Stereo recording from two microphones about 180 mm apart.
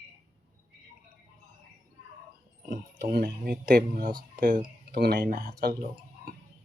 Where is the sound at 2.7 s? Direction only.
60° right (ahead or behind).